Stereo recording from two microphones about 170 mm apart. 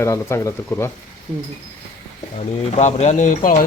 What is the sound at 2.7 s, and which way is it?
Speech, 40° left (ahead or behind).